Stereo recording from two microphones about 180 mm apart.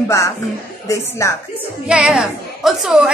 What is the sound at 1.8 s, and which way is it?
A woman's voice, 5° right (ahead or behind).